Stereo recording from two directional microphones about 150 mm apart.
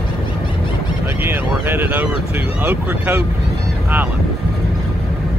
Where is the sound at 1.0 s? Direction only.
15° right (ahead or behind).